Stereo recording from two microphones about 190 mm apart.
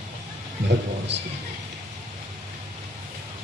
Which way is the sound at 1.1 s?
65° right (ahead or behind).